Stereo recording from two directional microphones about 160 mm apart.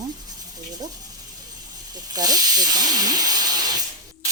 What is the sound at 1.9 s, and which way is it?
Speech, 25° right (ahead or behind).